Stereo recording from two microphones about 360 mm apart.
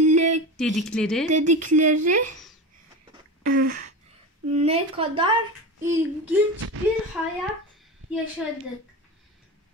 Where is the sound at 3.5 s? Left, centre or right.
Right.